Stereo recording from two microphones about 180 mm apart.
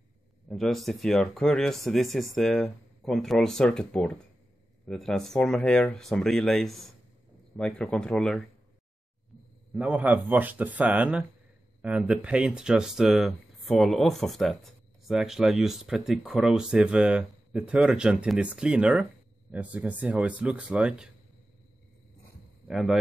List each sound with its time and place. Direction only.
0.5 s speech: centre (ahead or behind)
9.8 s speech: 10° right (ahead or behind)
22.7 s speech: centre (ahead or behind)